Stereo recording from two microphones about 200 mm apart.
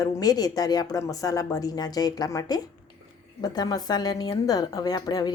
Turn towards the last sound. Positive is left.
turn(degrees=20)  # may be behind; listen again after turning